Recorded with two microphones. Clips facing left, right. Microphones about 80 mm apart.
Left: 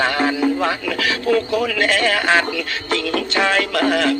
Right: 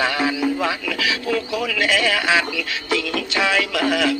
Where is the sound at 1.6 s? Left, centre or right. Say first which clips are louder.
Left 3 dB; left.